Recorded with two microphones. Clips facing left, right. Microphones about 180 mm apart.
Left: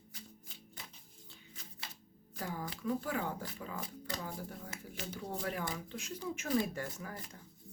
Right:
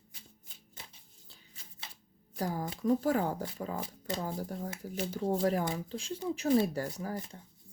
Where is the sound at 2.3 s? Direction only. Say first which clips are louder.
Right 6 dB; 40° right (ahead or behind).